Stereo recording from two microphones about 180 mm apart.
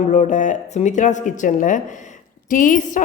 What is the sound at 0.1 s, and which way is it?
A woman's voice, 40° left (ahead or behind).